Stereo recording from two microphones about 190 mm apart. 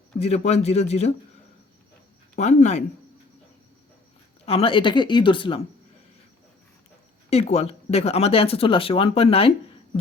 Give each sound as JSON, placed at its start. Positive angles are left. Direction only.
{"t": 0.2, "sound": "speech", "side_deg": 35}
{"t": 2.3, "sound": "speech", "side_deg": 40}
{"t": 4.4, "sound": "speech", "side_deg": 30}
{"t": 7.3, "sound": "speech", "side_deg": 35}